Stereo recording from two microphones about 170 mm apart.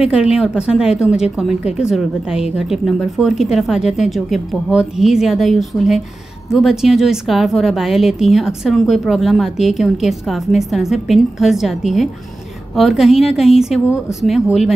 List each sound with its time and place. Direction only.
0.0 s a woman's voice: 5° right (ahead or behind)